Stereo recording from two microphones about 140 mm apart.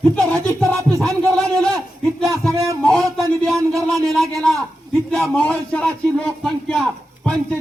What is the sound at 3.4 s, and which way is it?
A man's voice, centre (ahead or behind).